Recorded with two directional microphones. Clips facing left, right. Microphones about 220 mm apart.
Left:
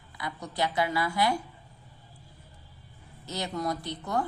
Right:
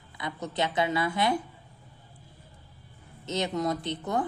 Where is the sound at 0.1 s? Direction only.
25° right (ahead or behind).